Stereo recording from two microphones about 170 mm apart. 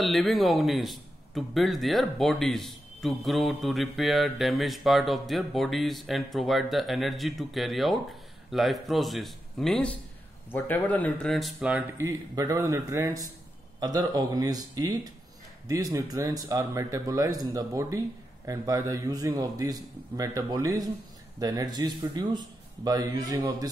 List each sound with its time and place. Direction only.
0.0 s a man's voice: centre (ahead or behind)
12.0 s speech: 20° right (ahead or behind)